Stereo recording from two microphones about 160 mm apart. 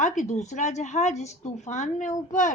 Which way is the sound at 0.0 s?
45° left (ahead or behind).